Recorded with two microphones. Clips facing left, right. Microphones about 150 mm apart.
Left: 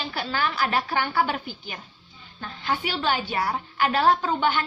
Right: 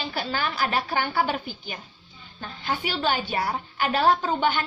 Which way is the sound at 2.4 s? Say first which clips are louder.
Left 1 dB; 30° right (ahead or behind).